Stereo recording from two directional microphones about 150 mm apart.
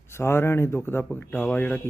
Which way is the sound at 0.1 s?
15° left (ahead or behind).